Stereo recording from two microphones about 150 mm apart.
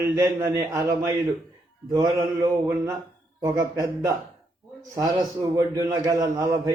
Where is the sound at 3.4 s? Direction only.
20° right (ahead or behind).